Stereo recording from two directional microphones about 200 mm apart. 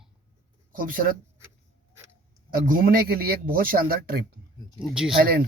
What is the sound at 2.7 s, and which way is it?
Speech, 45° right (ahead or behind).